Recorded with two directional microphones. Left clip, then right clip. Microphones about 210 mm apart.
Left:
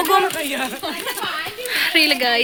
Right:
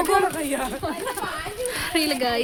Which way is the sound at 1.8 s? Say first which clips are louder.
Left 8 dB; 10° right (ahead or behind).